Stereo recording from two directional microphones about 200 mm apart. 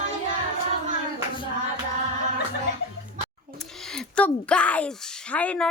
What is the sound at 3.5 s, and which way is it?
Speech, centre (ahead or behind).